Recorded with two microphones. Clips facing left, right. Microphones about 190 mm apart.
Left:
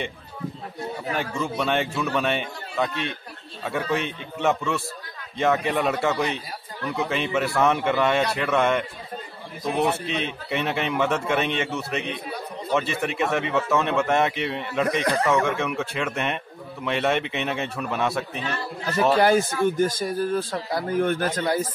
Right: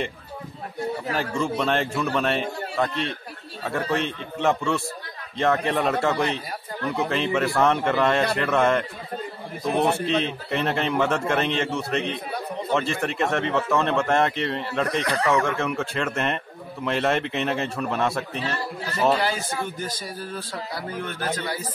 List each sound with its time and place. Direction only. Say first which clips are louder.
1.1 s a man's voice: right 1 dB; centre (ahead or behind)
3.6 s a man's voice: even; centre (ahead or behind)
19.1 s a man's voice: left 7 dB; 50° left (ahead or behind)